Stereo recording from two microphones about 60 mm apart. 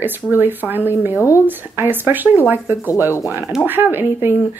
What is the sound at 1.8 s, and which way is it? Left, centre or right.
Speech, right.